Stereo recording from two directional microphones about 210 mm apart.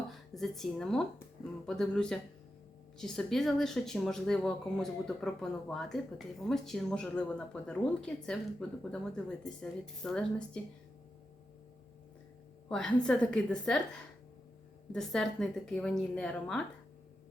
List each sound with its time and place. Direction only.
0.1 s a woman's voice: centre (ahead or behind)
12.6 s a woman's voice: 5° left (ahead or behind)
14.9 s a woman's voice: centre (ahead or behind)